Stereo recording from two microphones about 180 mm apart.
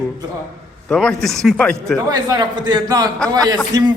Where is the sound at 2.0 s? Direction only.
20° right (ahead or behind).